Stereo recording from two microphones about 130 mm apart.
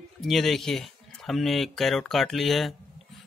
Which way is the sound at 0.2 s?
Centre (ahead or behind).